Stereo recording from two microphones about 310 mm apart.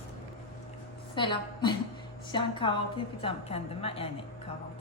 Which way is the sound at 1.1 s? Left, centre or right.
Centre.